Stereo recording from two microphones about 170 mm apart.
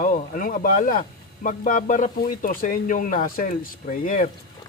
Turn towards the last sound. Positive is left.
turn(degrees=55)  # may be behind; listen again after turning